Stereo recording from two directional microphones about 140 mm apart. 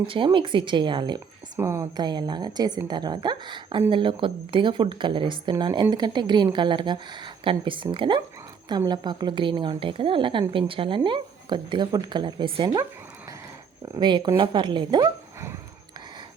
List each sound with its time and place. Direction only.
0.1 s a woman's voice: 35° right (ahead or behind)
1.5 s a woman's voice: 20° right (ahead or behind)
2.0 s a woman's voice: 30° right (ahead or behind)
14.0 s a woman's voice: 35° right (ahead or behind)